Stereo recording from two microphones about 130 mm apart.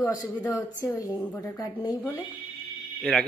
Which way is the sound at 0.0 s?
30° left (ahead or behind).